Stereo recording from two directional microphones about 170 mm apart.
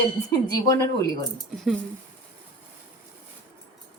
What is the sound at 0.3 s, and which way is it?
Speech, 20° left (ahead or behind).